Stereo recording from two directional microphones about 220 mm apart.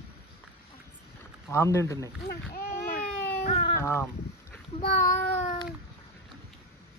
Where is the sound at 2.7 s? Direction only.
45° left (ahead or behind).